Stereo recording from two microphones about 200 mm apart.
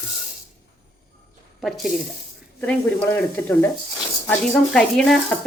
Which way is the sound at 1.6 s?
Centre (ahead or behind).